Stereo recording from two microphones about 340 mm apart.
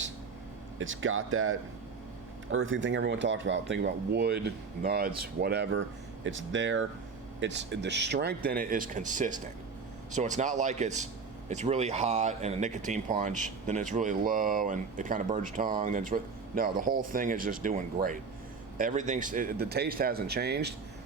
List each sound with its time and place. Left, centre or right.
0.8 s speech: right